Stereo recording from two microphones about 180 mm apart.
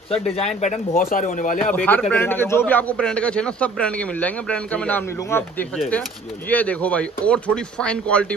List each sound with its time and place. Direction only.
0.1 s speech: 35° left (ahead or behind)
1.7 s a man's voice: 10° left (ahead or behind)